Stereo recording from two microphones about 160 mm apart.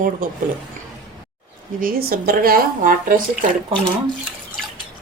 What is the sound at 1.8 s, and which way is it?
A woman's voice, 70° right (ahead or behind).